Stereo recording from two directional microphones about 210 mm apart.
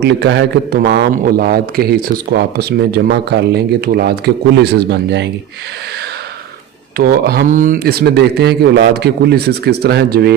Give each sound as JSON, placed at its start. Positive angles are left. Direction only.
{"t": 0.0, "sound": "a man's voice", "side_deg": -55}
{"t": 6.9, "sound": "a man's voice", "side_deg": -45}